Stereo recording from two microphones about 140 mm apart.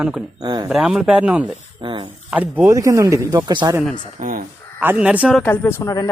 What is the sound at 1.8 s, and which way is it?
Speech, 35° right (ahead or behind).